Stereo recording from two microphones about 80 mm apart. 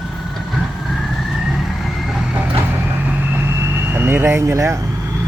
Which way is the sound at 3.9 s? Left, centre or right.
Right.